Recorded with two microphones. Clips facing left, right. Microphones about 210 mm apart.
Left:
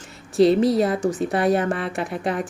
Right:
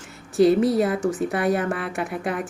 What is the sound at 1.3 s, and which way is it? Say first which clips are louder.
Speech: left 2 dB; 35° left (ahead or behind).